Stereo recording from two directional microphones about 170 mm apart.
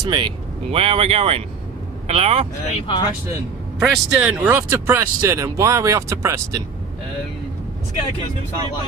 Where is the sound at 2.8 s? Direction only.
30° left (ahead or behind).